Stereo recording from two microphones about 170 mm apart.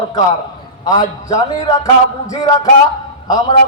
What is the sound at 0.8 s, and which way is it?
A man's voice, 20° left (ahead or behind).